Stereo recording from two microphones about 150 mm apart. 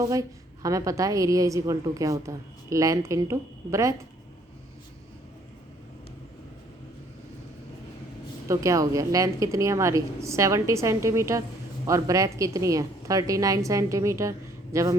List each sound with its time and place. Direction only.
0.0 s a woman's voice: 20° right (ahead or behind)
8.4 s a woman's voice: 20° right (ahead or behind)